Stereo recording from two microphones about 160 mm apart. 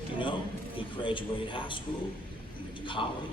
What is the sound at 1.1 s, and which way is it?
Speech, 30° left (ahead or behind).